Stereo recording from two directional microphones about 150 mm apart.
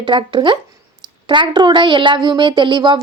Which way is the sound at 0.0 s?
30° right (ahead or behind).